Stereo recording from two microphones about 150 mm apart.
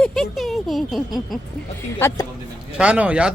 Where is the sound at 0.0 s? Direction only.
5° left (ahead or behind).